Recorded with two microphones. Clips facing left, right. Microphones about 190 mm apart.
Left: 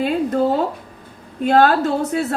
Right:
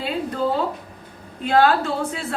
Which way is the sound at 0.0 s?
50° left (ahead or behind).